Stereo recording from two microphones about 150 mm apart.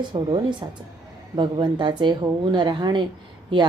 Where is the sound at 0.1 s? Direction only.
30° right (ahead or behind).